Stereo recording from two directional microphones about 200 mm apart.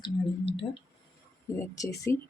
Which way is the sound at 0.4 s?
65° left (ahead or behind).